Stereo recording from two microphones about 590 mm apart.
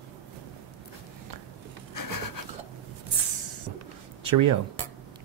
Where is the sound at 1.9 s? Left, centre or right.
Left.